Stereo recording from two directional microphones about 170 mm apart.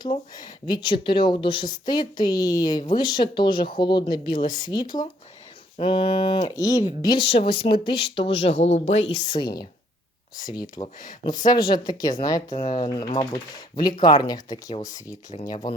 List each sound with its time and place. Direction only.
0.0 s speech: 25° left (ahead or behind)